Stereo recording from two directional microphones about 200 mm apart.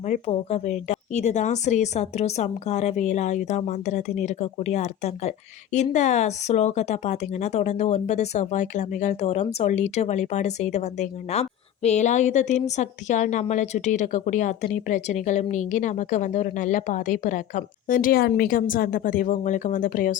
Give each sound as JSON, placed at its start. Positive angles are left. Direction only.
{"t": 0.0, "sound": "speech", "side_deg": 35}